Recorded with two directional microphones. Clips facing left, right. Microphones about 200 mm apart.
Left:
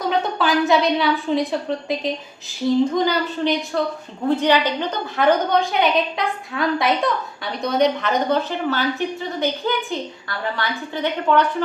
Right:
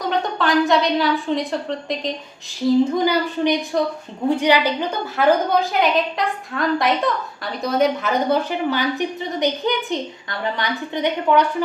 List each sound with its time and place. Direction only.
0.0 s a woman's voice: centre (ahead or behind)
2.6 s a woman's voice: 10° right (ahead or behind)